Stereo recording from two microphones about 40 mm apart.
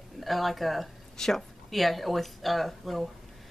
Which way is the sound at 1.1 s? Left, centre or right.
Centre.